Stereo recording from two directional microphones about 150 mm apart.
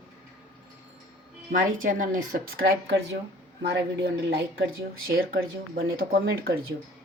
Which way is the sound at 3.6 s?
90° right.